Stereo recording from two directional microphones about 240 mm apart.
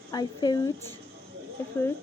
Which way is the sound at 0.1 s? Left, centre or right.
Centre.